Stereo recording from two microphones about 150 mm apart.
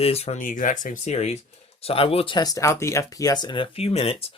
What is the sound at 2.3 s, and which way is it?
Speech, 25° left (ahead or behind).